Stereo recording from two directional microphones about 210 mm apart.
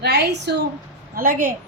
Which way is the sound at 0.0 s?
50° right (ahead or behind).